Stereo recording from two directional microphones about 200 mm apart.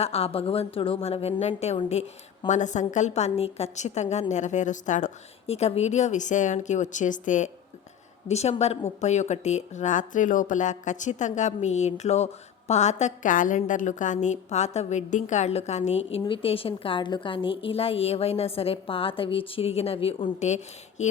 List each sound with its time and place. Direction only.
0.0 s a woman's voice: 30° left (ahead or behind)